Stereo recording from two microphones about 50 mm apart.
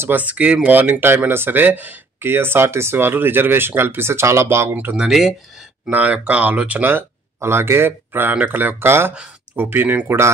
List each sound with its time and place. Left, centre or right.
0.1 s speech: right
0.7 s speech: right
2.2 s speech: right
4.9 s speech: centre
5.9 s speech: right
6.8 s speech: right
9.6 s speech: right
10.0 s speech: right